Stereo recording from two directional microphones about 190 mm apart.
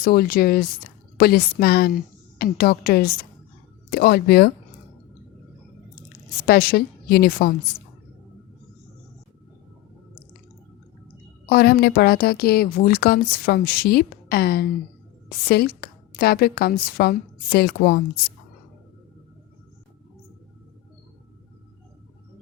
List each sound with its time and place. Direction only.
0.0 s a woman's voice: 50° left (ahead or behind)
6.4 s a woman's voice: 50° left (ahead or behind)
11.4 s a woman's voice: 55° left (ahead or behind)